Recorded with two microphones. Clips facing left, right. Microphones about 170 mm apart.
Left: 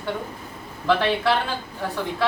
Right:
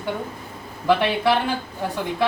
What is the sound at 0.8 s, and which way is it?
Speech, 15° right (ahead or behind).